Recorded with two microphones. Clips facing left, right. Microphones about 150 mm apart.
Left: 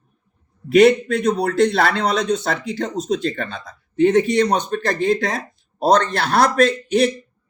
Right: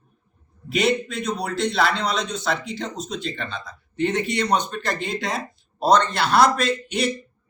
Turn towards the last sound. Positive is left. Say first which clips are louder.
# left 7 dB
turn(degrees=50)  # may be behind; listen again after turning